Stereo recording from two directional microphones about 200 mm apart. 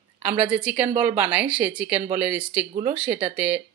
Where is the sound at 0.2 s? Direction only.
10° right (ahead or behind).